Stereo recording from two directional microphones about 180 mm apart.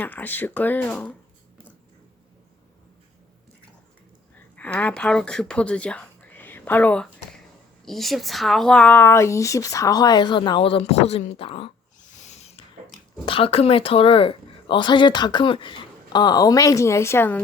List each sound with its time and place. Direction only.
0.0 s speech: 10° left (ahead or behind)
4.5 s speech: 10° left (ahead or behind); by 11.7 s 30° left (ahead or behind)
12.1 s a sound: 40° left (ahead or behind)
13.2 s speech: 30° left (ahead or behind); by 17.4 s 10° left (ahead or behind)